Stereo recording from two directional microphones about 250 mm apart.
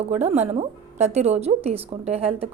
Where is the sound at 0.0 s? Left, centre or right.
Right.